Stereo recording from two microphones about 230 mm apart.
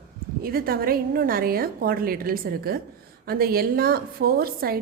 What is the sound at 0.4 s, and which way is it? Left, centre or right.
A woman's voice, right.